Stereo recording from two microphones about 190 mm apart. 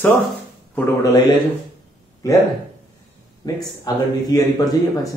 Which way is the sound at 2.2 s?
20° left (ahead or behind).